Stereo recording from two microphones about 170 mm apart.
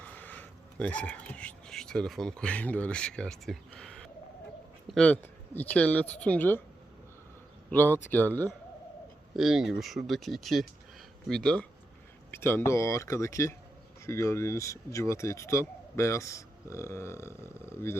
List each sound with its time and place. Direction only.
0.0 s speech: 10° left (ahead or behind)
7.7 s speech: 10° left (ahead or behind)
9.3 s speech: centre (ahead or behind); by 17.9 s 15° left (ahead or behind)